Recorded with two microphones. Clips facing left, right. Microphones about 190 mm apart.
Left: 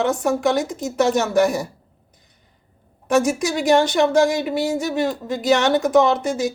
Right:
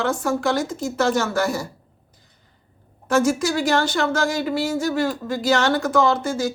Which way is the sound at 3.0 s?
20° left (ahead or behind).